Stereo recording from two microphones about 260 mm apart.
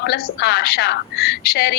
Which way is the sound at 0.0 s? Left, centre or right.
Left.